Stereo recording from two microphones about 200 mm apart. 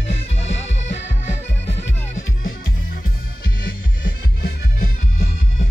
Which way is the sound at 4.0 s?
50° left (ahead or behind).